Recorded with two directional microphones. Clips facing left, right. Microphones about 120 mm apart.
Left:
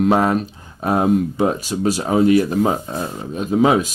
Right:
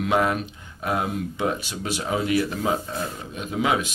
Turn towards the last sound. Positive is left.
turn(degrees=35)  # may be behind; listen again after turning